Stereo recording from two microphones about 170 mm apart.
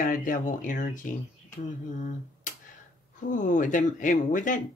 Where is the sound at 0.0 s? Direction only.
50° left (ahead or behind).